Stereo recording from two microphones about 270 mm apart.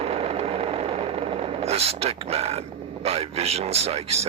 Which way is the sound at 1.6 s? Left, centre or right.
Right.